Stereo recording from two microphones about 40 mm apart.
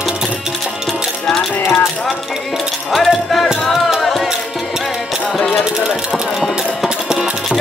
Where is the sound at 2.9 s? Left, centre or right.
Centre.